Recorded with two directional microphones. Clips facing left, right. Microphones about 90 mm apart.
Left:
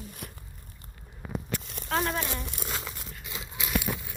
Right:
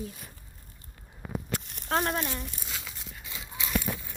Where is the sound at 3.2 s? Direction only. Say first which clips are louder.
Left 1 dB; 15° left (ahead or behind).